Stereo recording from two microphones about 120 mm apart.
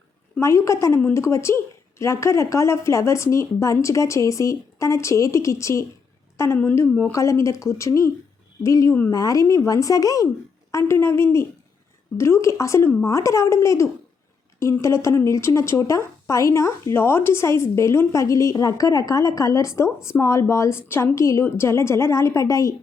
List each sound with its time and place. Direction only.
0.3 s speech: 25° left (ahead or behind)